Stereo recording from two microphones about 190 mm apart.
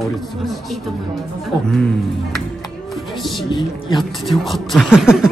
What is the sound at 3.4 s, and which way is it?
Speech, 25° left (ahead or behind).